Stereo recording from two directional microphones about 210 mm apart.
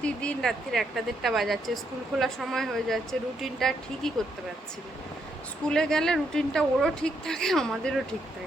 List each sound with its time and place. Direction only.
0.0 s speech: 5° left (ahead or behind)
5.6 s speech: 5° left (ahead or behind)